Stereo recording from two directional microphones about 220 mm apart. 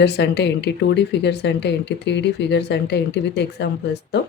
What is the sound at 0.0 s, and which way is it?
Speech, 50° left (ahead or behind).